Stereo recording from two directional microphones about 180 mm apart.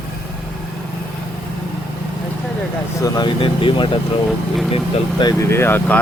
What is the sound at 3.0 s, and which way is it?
Speech, 25° left (ahead or behind).